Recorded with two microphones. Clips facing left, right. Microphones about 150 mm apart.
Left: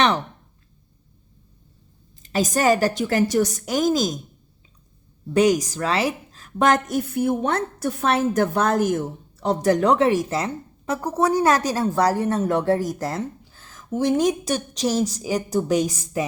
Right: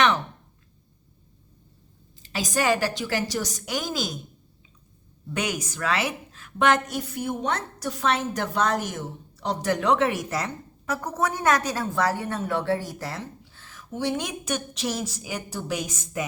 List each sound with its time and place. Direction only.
2.2 s a woman's voice: 45° left (ahead or behind)
5.3 s a woman's voice: 35° left (ahead or behind)